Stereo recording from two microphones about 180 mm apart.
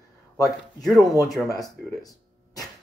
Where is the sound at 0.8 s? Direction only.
Centre (ahead or behind).